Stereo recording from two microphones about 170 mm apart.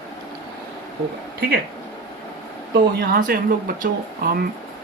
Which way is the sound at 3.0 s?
60° right (ahead or behind).